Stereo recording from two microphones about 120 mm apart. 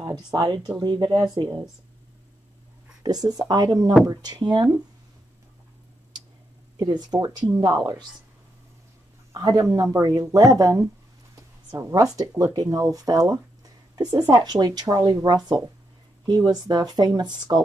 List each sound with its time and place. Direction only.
0.0 s speech: 40° right (ahead or behind)
3.0 s speech: 35° right (ahead or behind)
6.8 s speech: 35° right (ahead or behind)
9.3 s speech: 30° right (ahead or behind)